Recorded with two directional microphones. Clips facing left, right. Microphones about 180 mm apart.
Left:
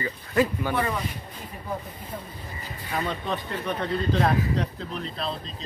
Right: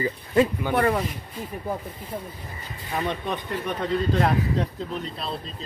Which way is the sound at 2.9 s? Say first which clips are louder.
Right 1 dB; 15° right (ahead or behind).